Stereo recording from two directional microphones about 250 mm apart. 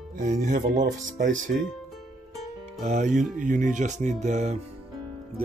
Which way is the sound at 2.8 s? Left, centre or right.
Right.